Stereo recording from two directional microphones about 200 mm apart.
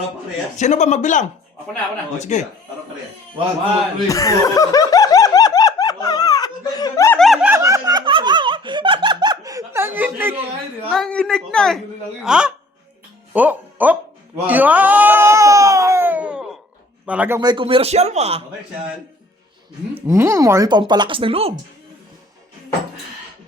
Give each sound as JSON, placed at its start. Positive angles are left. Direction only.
{"t": 0.5, "sound": "speech", "side_deg": 35}
{"t": 4.1, "sound": "snicker", "side_deg": 15}
{"t": 7.2, "sound": "snicker", "side_deg": 0}
{"t": 10.9, "sound": "a man's voice", "side_deg": 5}
{"t": 14.4, "sound": "baby cry", "side_deg": -10}
{"t": 17.1, "sound": "speech", "side_deg": -10}
{"t": 20.1, "sound": "speech", "side_deg": -15}